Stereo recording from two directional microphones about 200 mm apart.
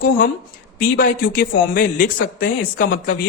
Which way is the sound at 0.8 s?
45° left (ahead or behind).